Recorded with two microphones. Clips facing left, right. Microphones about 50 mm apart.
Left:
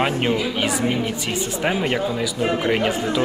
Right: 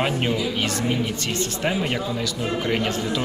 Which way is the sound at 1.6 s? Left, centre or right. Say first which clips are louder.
Left 4 dB; centre.